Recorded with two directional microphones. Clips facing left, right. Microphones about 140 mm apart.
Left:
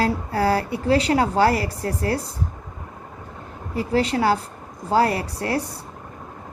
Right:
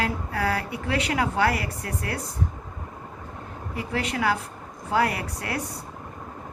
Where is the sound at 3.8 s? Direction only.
35° left (ahead or behind).